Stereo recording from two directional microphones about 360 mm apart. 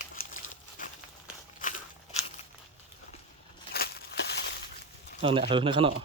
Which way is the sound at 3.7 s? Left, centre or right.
Left.